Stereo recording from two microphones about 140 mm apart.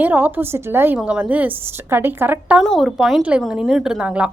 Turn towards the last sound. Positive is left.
turn(degrees=-5)  # may be behind; listen again after turning